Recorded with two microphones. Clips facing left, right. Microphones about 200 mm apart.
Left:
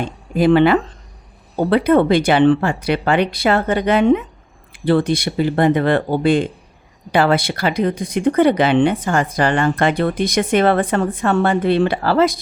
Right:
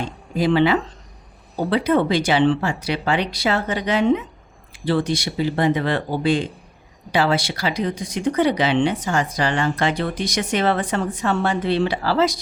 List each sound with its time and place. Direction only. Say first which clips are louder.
0.0 s speech: left 5 dB; 55° left (ahead or behind)